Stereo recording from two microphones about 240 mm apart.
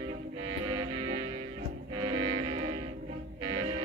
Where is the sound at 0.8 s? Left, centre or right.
Centre.